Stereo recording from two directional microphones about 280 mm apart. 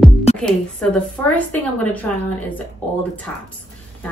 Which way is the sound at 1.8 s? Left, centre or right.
Centre.